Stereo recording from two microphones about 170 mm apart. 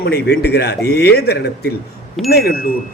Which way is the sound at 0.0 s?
70° left (ahead or behind).